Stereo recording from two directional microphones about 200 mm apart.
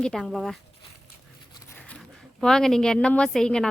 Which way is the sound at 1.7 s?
5° left (ahead or behind).